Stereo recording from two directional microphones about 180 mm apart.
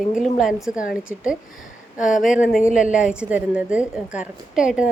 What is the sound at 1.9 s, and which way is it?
Speech, 45° left (ahead or behind).